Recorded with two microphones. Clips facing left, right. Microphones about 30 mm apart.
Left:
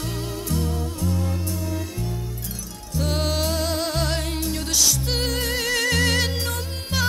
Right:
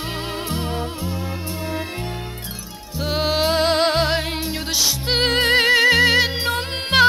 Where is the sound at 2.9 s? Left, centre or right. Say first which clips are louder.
Right 4 dB; right.